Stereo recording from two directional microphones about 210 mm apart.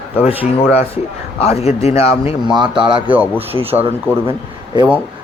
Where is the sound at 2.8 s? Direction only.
25° right (ahead or behind).